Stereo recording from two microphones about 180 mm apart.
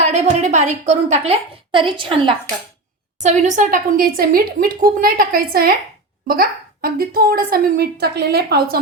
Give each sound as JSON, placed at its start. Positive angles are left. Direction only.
{"t": 0.0, "sound": "a woman's voice", "side_deg": -40}
{"t": 3.2, "sound": "a woman's voice", "side_deg": -40}